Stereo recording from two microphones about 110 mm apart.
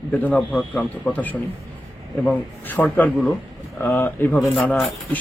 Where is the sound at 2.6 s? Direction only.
15° left (ahead or behind).